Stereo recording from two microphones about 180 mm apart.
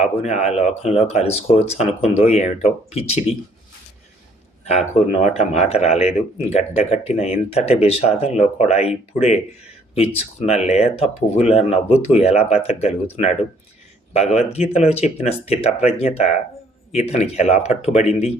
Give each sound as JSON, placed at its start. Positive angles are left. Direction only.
{"t": 0.0, "sound": "speech", "side_deg": 35}
{"t": 4.6, "sound": "speech", "side_deg": 40}
{"t": 10.4, "sound": "speech", "side_deg": 35}